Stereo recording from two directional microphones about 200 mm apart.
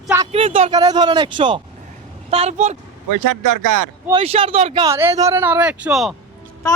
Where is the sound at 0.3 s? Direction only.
30° right (ahead or behind).